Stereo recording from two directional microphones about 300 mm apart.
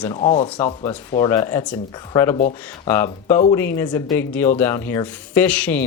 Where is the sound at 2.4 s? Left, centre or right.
Left.